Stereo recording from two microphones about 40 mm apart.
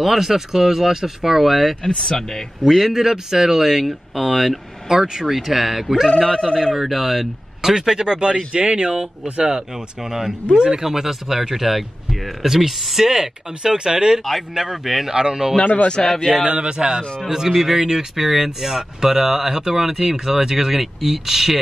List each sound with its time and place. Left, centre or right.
0.0 s speech: centre
2.0 s speech: centre
2.8 s speech: centre
5.3 s speech: centre
6.0 s speech: centre
6.7 s speech: centre
7.7 s speech: centre
15.6 s speech: left
16.4 s speech: right
17.3 s speech: centre